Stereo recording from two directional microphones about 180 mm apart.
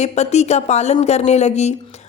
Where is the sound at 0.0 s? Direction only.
40° left (ahead or behind).